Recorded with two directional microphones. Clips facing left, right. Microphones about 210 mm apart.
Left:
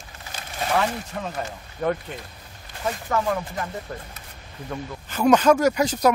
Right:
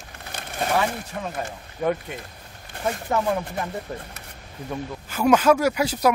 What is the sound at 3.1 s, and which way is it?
Speech, 20° right (ahead or behind).